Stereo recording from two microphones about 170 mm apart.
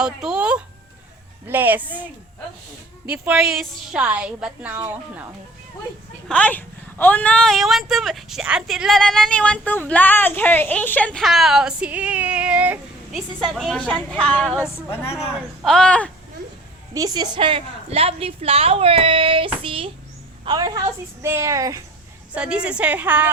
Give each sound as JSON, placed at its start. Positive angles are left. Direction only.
{"t": 0.0, "sound": "a woman's voice", "side_deg": -5}
{"t": 3.1, "sound": "a woman's voice", "side_deg": -5}
{"t": 6.2, "sound": "speech", "side_deg": 5}
{"t": 14.8, "sound": "speech", "side_deg": 15}
{"t": 15.6, "sound": "speech", "side_deg": 5}
{"t": 16.9, "sound": "a woman's voice", "side_deg": -20}
{"t": 22.4, "sound": "a woman's voice", "side_deg": -5}